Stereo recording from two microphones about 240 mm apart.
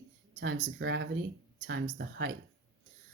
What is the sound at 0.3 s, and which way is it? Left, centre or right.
Speech, right.